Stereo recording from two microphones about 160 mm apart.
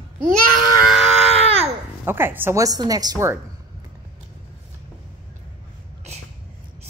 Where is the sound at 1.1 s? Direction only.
40° right (ahead or behind).